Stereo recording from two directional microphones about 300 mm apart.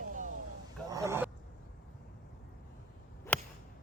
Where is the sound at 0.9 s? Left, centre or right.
Centre.